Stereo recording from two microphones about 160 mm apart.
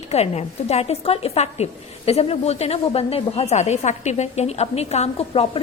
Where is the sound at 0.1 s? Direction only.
40° left (ahead or behind).